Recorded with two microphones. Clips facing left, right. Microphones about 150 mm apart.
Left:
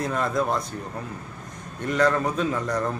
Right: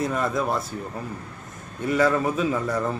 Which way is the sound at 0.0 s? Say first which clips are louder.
Even; 5° right (ahead or behind).